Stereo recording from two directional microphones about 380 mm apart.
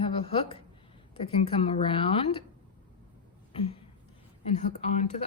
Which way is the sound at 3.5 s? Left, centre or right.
Centre.